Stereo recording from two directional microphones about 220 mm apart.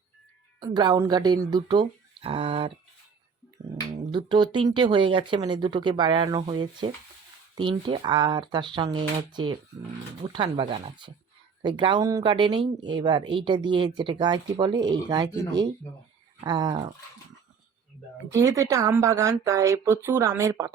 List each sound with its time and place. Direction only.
0.6 s speech: 20° right (ahead or behind)
4.1 s speech: 20° right (ahead or behind)
18.3 s a woman's voice: 15° right (ahead or behind)